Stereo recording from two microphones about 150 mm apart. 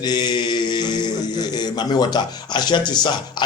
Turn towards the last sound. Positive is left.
turn(degrees=30)  # may be behind; listen again after turning